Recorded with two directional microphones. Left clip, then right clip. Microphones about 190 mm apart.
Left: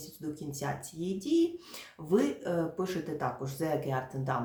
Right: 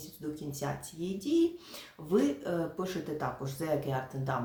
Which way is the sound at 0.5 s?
15° left (ahead or behind).